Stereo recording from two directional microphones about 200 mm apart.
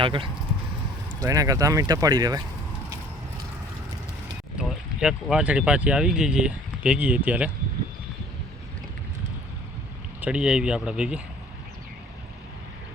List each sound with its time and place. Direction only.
0.0 s speech: 25° right (ahead or behind)
4.5 s speech: 5° right (ahead or behind)
10.2 s speech: 5° right (ahead or behind)